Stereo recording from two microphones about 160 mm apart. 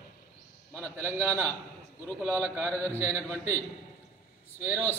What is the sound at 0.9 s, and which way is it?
Speech, 15° right (ahead or behind).